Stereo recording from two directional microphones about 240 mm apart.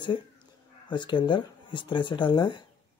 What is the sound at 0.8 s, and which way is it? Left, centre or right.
Speech, centre.